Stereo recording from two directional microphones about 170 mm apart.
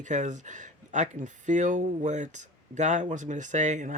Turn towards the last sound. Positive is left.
turn(degrees=-45)  # may be behind; listen again after turning